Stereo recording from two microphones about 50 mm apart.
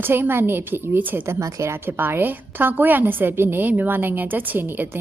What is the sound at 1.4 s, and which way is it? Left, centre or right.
Speech, right.